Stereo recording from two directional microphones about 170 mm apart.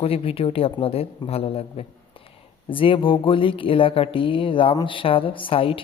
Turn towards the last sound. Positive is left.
turn(degrees=30)  # may be behind; listen again after turning